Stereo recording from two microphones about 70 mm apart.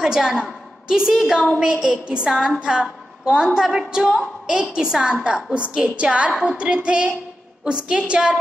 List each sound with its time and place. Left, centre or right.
0.0 s a woman's voice: centre